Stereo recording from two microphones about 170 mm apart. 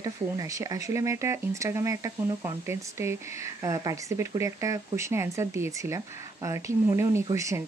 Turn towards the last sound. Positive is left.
turn(degrees=-20)  # may be behind; listen again after turning